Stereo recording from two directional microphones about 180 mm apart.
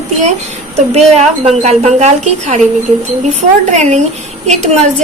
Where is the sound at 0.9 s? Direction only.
35° right (ahead or behind).